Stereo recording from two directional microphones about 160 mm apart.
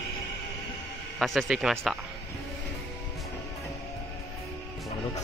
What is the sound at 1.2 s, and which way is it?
Speech, centre (ahead or behind).